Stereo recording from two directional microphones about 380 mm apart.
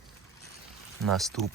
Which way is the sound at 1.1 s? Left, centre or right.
Centre.